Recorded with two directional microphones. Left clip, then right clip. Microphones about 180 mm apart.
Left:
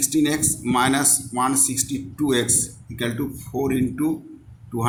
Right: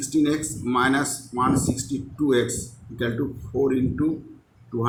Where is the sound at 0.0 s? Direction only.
50° left (ahead or behind).